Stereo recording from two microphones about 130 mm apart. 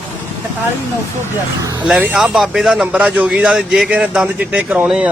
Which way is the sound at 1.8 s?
10° right (ahead or behind).